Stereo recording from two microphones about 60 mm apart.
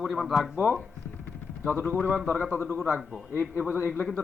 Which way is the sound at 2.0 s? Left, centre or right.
Left.